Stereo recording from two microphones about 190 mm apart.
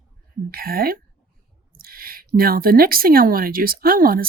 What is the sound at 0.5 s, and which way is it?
Speech, 50° right (ahead or behind).